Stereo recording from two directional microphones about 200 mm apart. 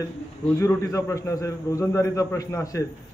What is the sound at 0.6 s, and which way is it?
A man's voice, 15° left (ahead or behind).